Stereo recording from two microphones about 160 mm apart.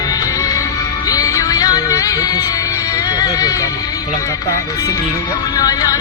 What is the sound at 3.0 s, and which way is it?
Speech, 25° left (ahead or behind).